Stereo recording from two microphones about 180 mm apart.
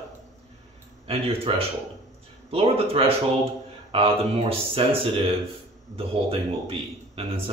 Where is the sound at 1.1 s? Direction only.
30° right (ahead or behind).